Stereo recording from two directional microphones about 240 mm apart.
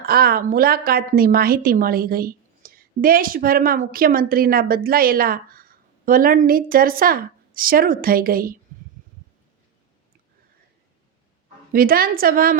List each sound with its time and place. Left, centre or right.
0.0 s a woman's voice: right
11.7 s a woman's voice: right